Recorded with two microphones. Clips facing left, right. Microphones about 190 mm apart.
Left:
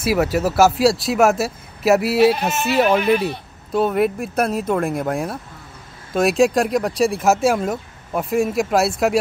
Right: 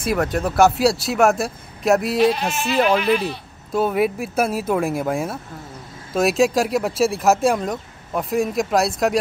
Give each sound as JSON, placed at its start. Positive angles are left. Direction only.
{"t": 0.0, "sound": "speech", "side_deg": 5}
{"t": 3.0, "sound": "speech", "side_deg": 55}
{"t": 3.7, "sound": "speech", "side_deg": 0}